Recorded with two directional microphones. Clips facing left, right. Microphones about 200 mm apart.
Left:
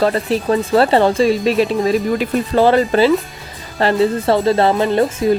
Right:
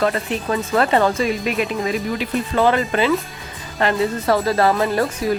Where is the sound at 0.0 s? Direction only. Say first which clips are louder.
Left 5 dB; 35° left (ahead or behind).